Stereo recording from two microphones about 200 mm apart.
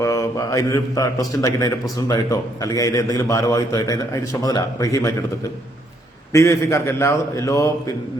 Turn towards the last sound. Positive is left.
turn(degrees=15)  # may be behind; listen again after turning